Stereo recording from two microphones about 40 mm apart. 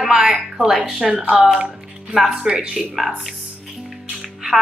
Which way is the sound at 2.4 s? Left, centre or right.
Centre.